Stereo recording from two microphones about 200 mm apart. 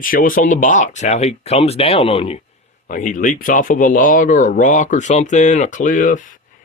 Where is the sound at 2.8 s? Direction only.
40° left (ahead or behind).